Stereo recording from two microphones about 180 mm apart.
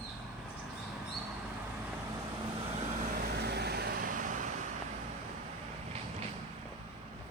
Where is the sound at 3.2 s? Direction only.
65° right (ahead or behind); by 4.4 s 45° right (ahead or behind).